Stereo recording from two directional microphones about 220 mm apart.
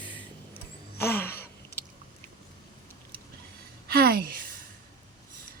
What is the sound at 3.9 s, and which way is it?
Speech, 45° right (ahead or behind).